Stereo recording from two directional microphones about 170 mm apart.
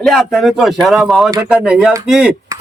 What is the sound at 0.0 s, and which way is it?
Speech, centre (ahead or behind).